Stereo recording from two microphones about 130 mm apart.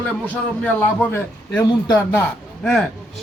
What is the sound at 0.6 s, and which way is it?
A man's voice, 10° left (ahead or behind).